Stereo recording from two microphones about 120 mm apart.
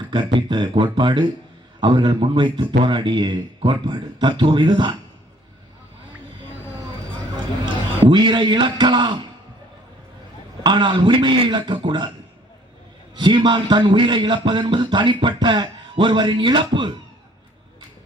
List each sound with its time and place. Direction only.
0.0 s a man's voice: 40° right (ahead or behind)
7.6 s a man's voice: 40° right (ahead or behind)
10.6 s a man's voice: 40° right (ahead or behind)
13.1 s a man's voice: 40° right (ahead or behind)